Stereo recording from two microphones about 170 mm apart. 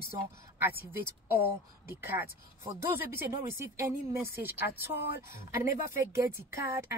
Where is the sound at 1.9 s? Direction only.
15° right (ahead or behind).